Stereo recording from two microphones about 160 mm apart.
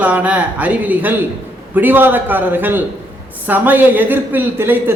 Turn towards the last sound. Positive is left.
turn(degrees=-15)  # may be behind; listen again after turning